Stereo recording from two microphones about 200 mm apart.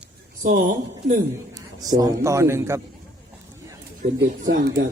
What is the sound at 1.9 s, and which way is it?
Speech, 15° right (ahead or behind).